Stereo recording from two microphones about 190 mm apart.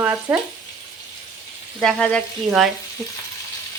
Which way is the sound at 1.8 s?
5° left (ahead or behind).